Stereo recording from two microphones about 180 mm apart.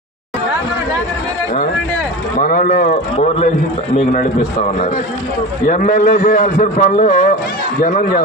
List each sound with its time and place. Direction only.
2.4 s a man's voice: 50° left (ahead or behind)
5.6 s a man's voice: 50° left (ahead or behind)